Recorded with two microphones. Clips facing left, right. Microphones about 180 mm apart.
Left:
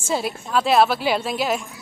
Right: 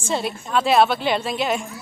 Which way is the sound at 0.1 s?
Centre (ahead or behind).